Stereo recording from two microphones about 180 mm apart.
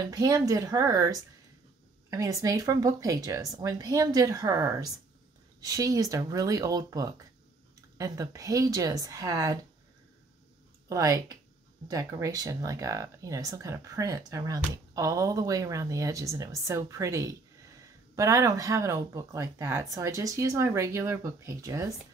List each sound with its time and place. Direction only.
0.0 s speech: 20° right (ahead or behind)
10.9 s speech: 20° right (ahead or behind)